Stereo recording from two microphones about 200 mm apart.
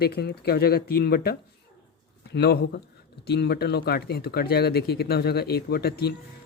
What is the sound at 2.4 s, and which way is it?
Speech, 55° left (ahead or behind).